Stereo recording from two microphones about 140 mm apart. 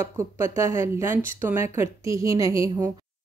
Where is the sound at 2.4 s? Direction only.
40° left (ahead or behind).